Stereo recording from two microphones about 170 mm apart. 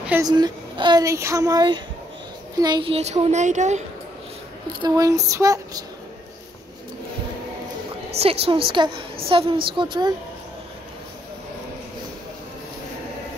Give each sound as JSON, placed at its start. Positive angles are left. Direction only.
{"t": 0.2, "sound": "speech", "side_deg": -25}
{"t": 4.8, "sound": "speech", "side_deg": -20}
{"t": 8.2, "sound": "speech", "side_deg": -35}